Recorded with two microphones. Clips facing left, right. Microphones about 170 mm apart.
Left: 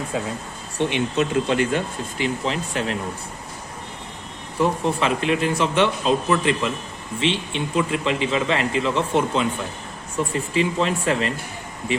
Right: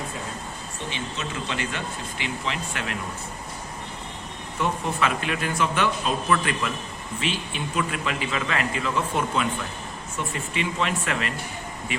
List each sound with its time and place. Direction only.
0.8 s speech: 60° left (ahead or behind); by 3.0 s 35° left (ahead or behind)
4.5 s speech: 30° left (ahead or behind)